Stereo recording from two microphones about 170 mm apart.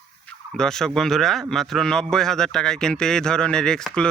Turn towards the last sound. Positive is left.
turn(degrees=5)  # may be behind; listen again after turning